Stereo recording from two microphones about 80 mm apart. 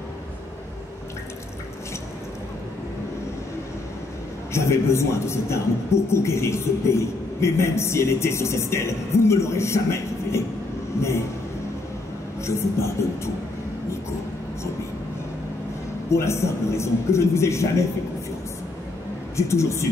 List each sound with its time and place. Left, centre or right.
4.5 s a man's voice: left
12.4 s a man's voice: left
16.1 s a man's voice: left
19.3 s a man's voice: left